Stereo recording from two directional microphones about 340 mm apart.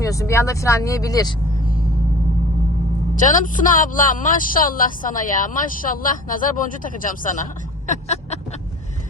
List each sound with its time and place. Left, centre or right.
0.0 s speech: centre
3.2 s speech: left